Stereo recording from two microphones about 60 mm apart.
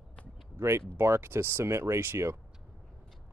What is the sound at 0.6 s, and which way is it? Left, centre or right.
Speech, right.